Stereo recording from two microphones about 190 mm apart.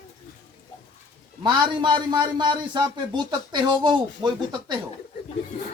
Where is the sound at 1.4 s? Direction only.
25° right (ahead or behind).